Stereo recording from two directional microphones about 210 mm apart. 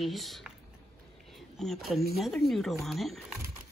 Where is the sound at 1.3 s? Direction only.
Centre (ahead or behind).